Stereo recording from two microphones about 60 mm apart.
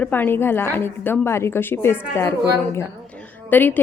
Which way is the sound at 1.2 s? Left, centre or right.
Left.